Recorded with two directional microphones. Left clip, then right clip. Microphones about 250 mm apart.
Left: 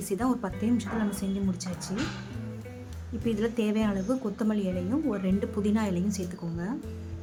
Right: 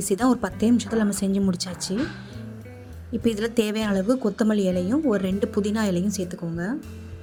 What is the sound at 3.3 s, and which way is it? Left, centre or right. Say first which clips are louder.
A woman's voice: right 5 dB; right.